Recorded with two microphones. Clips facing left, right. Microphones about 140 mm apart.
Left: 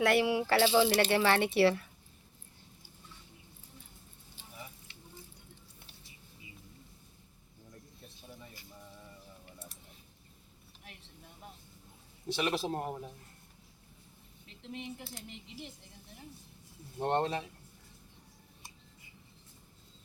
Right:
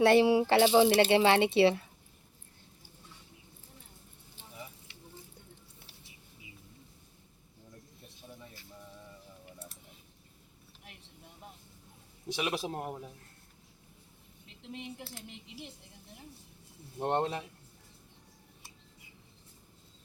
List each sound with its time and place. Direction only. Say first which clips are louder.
0.0 s speech: right 5 dB; 30° right (ahead or behind)
12.3 s speech: left 2 dB; 10° right (ahead or behind)
17.0 s speech: even; 5° right (ahead or behind)